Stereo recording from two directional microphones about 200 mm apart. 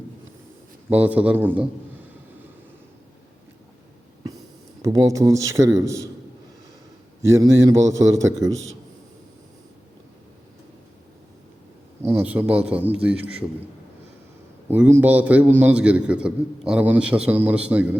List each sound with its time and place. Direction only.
0.9 s a man's voice: 5° right (ahead or behind)
4.8 s a man's voice: 15° right (ahead or behind)
7.2 s a man's voice: 15° right (ahead or behind)
12.0 s a man's voice: 10° right (ahead or behind)
14.7 s a man's voice: 10° right (ahead or behind)